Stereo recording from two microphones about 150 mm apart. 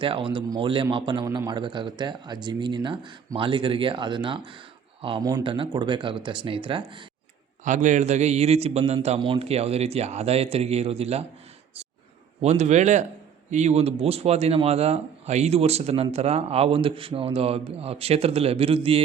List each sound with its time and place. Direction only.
0.0 s a man's voice: 35° right (ahead or behind)
7.6 s a man's voice: 55° right (ahead or behind)
12.4 s a man's voice: 45° right (ahead or behind)